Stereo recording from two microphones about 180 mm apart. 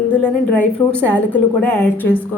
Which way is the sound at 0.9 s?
10° left (ahead or behind).